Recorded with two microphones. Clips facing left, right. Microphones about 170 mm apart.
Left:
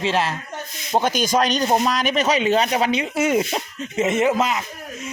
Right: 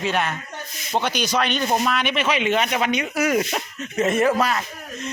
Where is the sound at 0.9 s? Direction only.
45° left (ahead or behind); by 4.6 s 20° left (ahead or behind).